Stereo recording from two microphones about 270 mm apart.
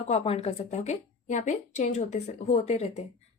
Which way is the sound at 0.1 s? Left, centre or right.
Left.